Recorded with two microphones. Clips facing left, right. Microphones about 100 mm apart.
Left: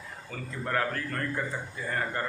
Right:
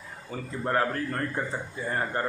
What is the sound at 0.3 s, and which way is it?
Speech, 25° right (ahead or behind).